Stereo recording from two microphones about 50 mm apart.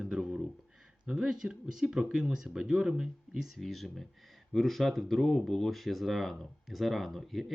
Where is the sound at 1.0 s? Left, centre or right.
Centre.